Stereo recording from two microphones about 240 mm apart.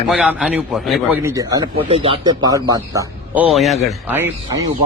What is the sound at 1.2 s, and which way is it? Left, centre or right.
Speech, centre.